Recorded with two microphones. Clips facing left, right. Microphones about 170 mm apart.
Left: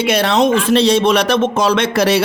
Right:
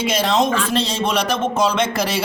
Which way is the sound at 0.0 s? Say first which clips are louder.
Left 4 dB; 65° left (ahead or behind).